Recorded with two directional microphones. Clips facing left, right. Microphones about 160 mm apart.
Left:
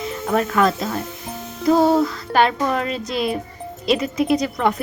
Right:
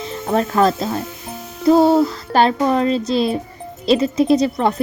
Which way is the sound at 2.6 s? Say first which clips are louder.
Right 5 dB; 30° right (ahead or behind).